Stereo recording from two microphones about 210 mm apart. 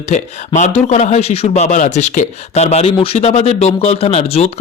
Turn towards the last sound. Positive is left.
turn(degrees=30)  # may be behind; listen again after turning